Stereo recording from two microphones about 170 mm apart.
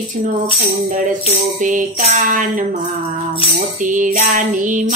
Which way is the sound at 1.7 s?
45° right (ahead or behind).